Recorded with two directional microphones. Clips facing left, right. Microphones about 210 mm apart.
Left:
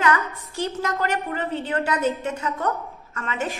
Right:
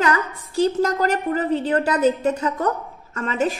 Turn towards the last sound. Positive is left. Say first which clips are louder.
# right 6 dB
turn(degrees=-35)  # may be behind; listen again after turning